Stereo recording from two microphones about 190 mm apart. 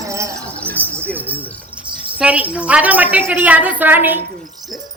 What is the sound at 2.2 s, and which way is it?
A woman's voice, 5° right (ahead or behind).